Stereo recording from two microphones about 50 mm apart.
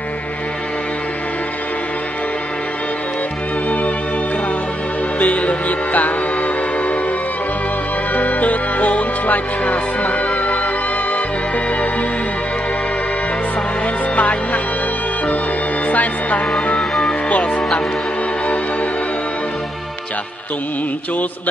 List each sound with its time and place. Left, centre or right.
5.2 s music: left
8.1 s music: left
14.1 s speech: left
15.9 s speech: left
17.0 s music: left